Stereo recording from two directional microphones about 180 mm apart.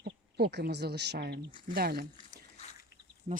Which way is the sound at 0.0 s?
65° right (ahead or behind).